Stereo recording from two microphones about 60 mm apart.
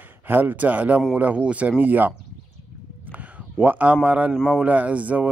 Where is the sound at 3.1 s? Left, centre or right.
Right.